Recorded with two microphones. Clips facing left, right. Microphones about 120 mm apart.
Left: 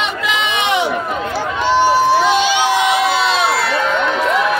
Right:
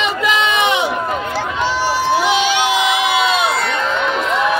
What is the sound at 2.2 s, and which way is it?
Crowd, 10° right (ahead or behind).